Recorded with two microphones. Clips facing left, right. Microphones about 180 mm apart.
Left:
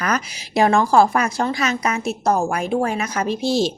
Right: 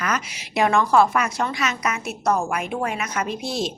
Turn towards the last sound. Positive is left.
turn(degrees=30)  # may be behind; listen again after turning